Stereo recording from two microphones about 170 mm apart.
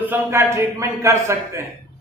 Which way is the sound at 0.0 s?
10° right (ahead or behind).